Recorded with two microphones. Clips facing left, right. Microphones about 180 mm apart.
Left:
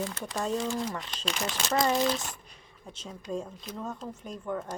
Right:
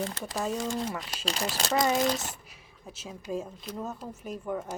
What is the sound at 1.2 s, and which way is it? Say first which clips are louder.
Speech: right 1 dB; 35° right (ahead or behind).